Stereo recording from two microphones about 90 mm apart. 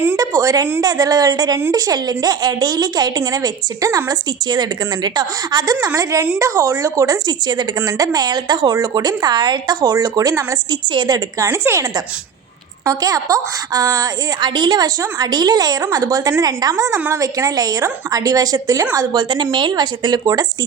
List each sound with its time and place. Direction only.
0.2 s a woman's voice: 40° right (ahead or behind)
7.3 s a woman's voice: 50° right (ahead or behind)
11.3 s a woman's voice: 30° right (ahead or behind)
12.8 s a woman's voice: 40° right (ahead or behind)
18.9 s speech: 55° right (ahead or behind)